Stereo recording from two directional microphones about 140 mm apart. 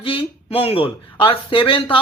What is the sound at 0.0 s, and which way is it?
Speech, 40° left (ahead or behind).